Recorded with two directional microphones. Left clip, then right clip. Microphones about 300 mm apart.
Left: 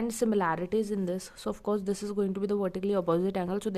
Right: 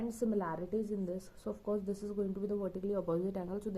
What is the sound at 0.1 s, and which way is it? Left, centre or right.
Speech, left.